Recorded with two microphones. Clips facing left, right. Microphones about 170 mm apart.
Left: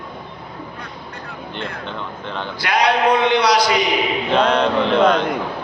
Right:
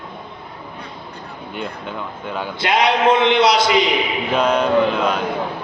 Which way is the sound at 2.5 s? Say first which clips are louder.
Even; 25° right (ahead or behind).